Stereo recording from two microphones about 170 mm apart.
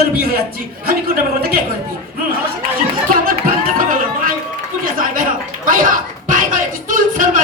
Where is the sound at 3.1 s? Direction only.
55° right (ahead or behind).